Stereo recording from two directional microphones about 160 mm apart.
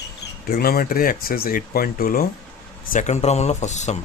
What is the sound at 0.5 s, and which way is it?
Speech, 70° left (ahead or behind).